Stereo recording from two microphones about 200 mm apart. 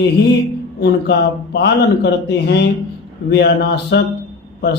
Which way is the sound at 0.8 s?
55° left (ahead or behind).